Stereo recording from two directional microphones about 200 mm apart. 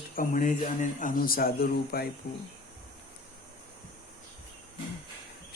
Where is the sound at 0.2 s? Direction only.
40° left (ahead or behind).